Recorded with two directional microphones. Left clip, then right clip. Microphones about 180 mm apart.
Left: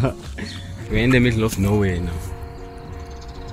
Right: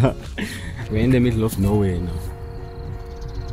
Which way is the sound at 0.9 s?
15° right (ahead or behind).